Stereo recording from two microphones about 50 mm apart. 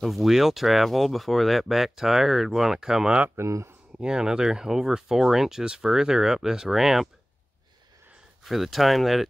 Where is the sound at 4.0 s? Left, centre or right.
Centre.